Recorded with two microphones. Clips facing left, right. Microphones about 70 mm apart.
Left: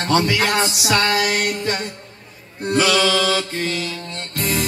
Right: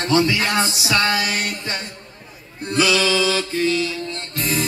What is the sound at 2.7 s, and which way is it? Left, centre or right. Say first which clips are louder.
Music: left 1 dB; left.